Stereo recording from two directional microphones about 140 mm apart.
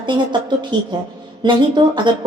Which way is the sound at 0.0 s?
35° right (ahead or behind).